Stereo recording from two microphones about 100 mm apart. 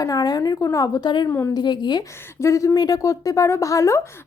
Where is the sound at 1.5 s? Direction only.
45° left (ahead or behind).